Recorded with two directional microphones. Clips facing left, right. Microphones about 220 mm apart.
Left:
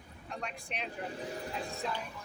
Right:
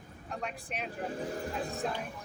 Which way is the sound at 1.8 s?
50° right (ahead or behind).